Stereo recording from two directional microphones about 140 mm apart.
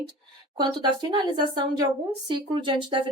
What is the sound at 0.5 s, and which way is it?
A woman's voice, 30° right (ahead or behind).